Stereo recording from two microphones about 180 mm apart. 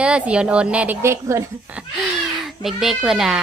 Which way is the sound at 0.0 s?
5° right (ahead or behind).